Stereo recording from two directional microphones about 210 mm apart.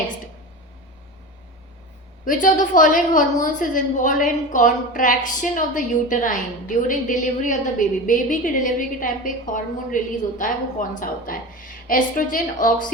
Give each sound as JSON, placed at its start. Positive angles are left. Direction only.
{"t": 2.2, "sound": "a woman's voice", "side_deg": 40}